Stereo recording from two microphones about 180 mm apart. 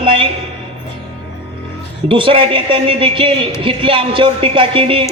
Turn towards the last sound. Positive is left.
turn(degrees=-30)  # may be behind; listen again after turning